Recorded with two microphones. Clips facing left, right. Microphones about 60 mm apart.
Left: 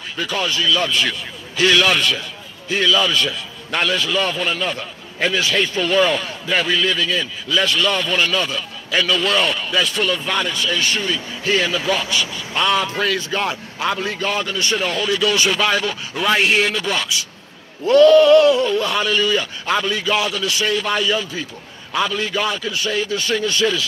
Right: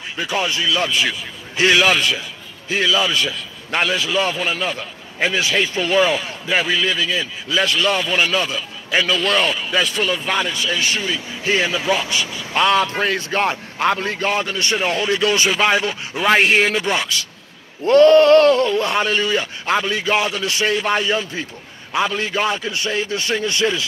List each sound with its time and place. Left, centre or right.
0.2 s a man's voice: right
11.4 s a man's voice: right
12.8 s a man's voice: right
17.8 s a sound: right
18.8 s a man's voice: right